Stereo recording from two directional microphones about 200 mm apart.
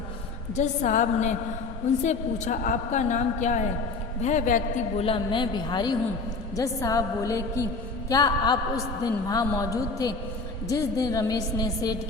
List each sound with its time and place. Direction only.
0.5 s a woman's voice: 35° left (ahead or behind); by 11.9 s 20° left (ahead or behind)